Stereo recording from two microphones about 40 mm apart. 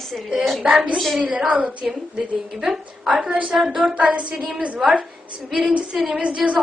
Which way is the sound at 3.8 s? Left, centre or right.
Right.